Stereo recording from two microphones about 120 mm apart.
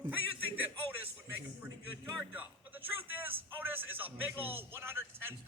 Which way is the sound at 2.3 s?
15° right (ahead or behind).